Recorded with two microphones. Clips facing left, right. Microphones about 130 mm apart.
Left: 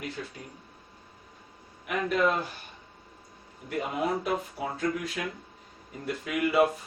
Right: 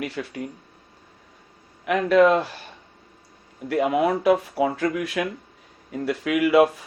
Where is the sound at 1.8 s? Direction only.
90° right.